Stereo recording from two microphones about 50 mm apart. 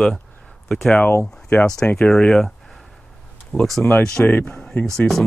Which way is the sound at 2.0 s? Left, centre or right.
Centre.